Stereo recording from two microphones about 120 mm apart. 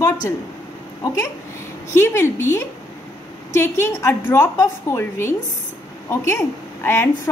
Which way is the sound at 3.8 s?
20° left (ahead or behind).